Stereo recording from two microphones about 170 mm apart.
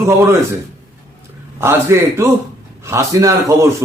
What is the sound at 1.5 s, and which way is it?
A man's voice, 15° right (ahead or behind).